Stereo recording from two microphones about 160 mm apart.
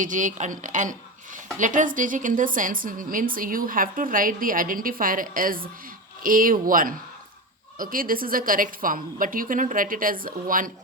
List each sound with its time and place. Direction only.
0.0 s speech: 50° right (ahead or behind)